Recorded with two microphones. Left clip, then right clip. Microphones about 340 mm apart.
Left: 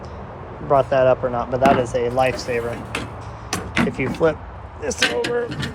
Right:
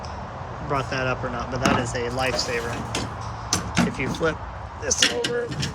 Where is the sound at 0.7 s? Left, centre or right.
Centre.